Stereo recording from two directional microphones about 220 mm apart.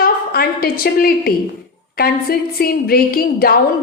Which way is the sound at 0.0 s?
45° left (ahead or behind).